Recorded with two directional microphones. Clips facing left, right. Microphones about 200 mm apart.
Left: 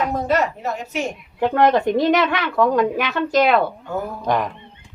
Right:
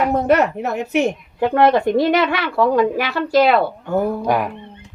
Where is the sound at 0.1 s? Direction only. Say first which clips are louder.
Right 5 dB; 60° right (ahead or behind).